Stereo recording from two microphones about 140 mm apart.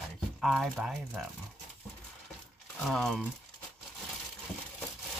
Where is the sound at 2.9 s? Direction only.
Centre (ahead or behind).